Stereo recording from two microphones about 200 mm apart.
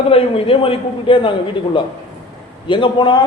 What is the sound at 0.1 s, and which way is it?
A man's voice, 30° left (ahead or behind).